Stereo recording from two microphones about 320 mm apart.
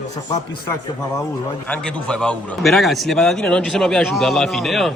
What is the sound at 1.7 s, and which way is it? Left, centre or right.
A man's voice, centre.